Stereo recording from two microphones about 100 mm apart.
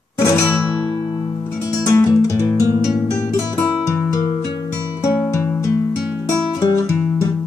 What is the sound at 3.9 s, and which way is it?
Music, 30° left (ahead or behind).